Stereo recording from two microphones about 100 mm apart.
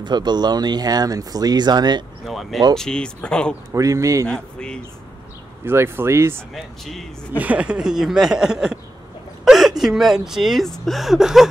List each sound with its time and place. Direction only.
0.0 s speech: 45° right (ahead or behind)
2.2 s speech: centre (ahead or behind)
3.7 s speech: 30° right (ahead or behind)
4.3 s speech: 10° left (ahead or behind)
5.7 s speech: 25° right (ahead or behind)
6.5 s speech: 5° left (ahead or behind)
7.3 s speech: 15° right (ahead or behind)